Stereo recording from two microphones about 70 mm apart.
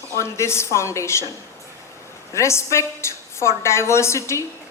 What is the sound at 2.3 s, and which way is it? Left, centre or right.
A woman's voice, left.